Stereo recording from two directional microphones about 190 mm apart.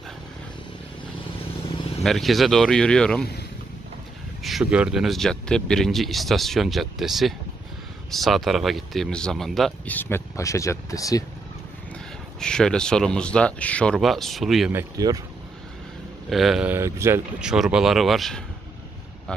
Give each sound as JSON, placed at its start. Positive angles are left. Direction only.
{"t": 2.0, "sound": "speech", "side_deg": 0}
{"t": 4.4, "sound": "speech", "side_deg": 0}
{"t": 12.4, "sound": "speech", "side_deg": 5}
{"t": 14.7, "sound": "speech", "side_deg": -15}
{"t": 16.3, "sound": "speech", "side_deg": 0}